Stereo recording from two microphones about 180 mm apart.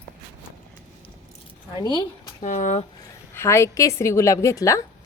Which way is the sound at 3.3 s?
15° left (ahead or behind).